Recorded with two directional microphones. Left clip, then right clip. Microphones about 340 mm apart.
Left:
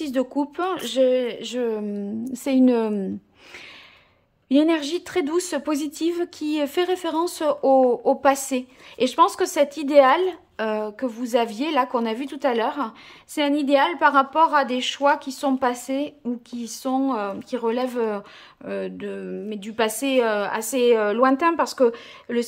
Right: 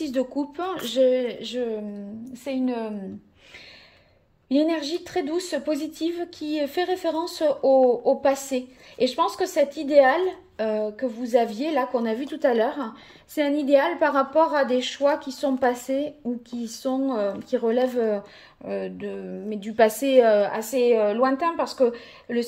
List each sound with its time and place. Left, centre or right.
0.0 s a woman's voice: centre
4.5 s a woman's voice: centre